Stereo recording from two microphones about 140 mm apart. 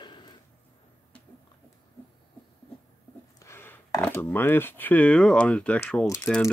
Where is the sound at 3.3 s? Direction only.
20° left (ahead or behind).